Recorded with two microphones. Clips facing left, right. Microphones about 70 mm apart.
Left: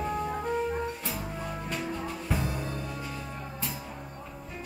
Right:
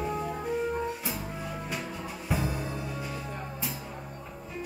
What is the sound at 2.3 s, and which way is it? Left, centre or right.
Music, centre.